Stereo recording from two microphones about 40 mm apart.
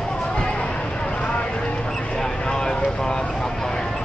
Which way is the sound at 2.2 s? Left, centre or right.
Centre.